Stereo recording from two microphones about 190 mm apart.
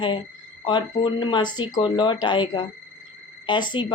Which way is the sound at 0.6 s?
25° left (ahead or behind).